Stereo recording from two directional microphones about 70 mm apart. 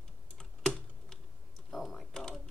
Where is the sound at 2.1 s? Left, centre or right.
Centre.